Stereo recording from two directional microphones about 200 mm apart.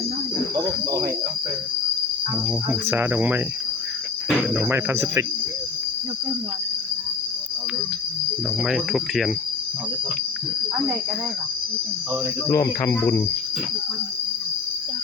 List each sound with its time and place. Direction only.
0.5 s speech: 15° right (ahead or behind)
2.6 s speech: 10° right (ahead or behind)
4.4 s speech: 10° right (ahead or behind)
8.6 s speech: centre (ahead or behind)
12.5 s speech: 15° left (ahead or behind)